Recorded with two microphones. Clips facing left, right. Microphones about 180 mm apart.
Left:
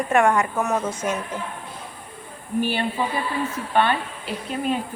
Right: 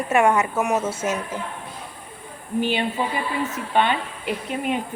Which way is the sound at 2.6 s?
20° right (ahead or behind).